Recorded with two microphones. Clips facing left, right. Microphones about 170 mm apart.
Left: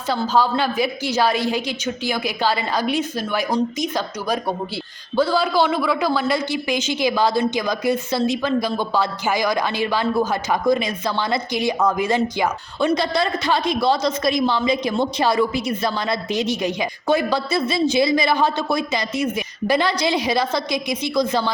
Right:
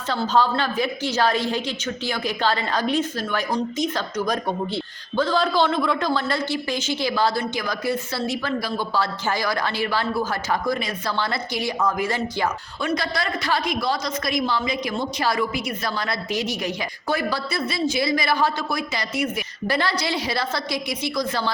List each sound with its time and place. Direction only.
0.1 s a woman's voice: 10° left (ahead or behind)